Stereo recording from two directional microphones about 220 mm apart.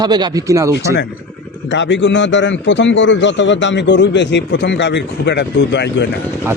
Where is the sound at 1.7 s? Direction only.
55° left (ahead or behind).